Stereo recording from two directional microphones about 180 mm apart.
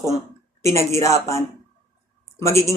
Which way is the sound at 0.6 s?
15° left (ahead or behind).